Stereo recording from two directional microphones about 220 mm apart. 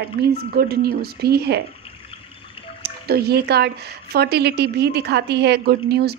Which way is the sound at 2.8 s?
45° right (ahead or behind).